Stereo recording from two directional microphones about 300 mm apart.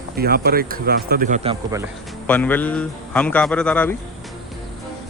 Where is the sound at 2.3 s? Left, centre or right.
Centre.